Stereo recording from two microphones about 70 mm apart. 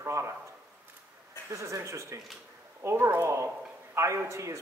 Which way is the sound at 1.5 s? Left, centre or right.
Right.